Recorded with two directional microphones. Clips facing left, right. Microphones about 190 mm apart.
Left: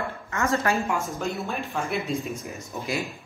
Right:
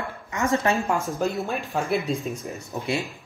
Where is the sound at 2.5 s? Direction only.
35° right (ahead or behind).